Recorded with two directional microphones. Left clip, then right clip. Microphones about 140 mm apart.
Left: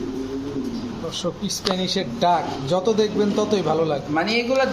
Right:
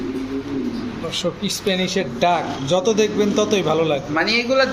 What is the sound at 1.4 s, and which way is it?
A man's voice, 10° right (ahead or behind).